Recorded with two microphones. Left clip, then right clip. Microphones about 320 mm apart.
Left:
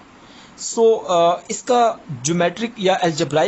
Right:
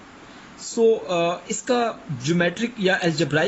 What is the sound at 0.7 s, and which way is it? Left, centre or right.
Speech, left.